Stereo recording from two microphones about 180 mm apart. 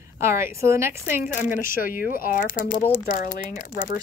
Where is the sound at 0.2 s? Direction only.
15° right (ahead or behind).